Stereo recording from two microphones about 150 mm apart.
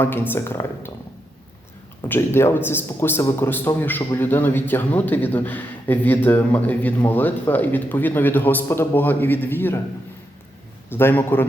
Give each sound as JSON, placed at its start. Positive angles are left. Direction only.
{"t": 0.0, "sound": "a man's voice", "side_deg": 15}
{"t": 2.0, "sound": "a man's voice", "side_deg": 15}
{"t": 10.9, "sound": "a man's voice", "side_deg": 15}